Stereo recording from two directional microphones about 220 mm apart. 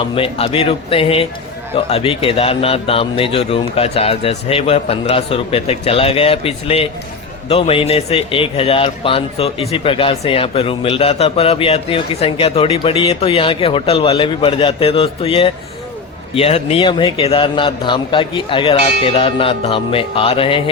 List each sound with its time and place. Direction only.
0.2 s speech: 25° left (ahead or behind)